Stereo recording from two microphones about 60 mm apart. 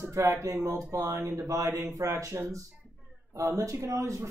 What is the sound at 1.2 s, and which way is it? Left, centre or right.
Speech, right.